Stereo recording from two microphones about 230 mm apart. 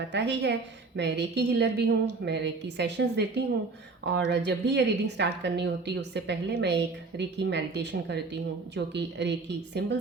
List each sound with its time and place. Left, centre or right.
0.1 s a woman's voice: right